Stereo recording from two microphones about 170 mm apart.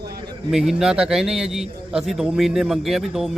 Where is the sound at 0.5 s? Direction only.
5° right (ahead or behind).